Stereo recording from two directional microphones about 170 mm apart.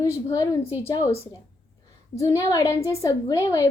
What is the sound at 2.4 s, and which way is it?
A woman's voice, 20° left (ahead or behind).